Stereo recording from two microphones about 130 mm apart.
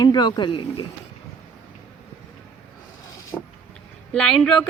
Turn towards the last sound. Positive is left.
turn(degrees=5)  # may be behind; listen again after turning